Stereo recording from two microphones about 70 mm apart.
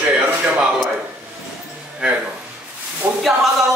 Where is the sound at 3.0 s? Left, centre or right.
Right.